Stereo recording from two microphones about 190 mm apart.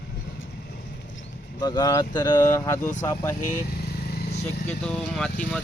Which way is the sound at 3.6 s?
55° left (ahead or behind).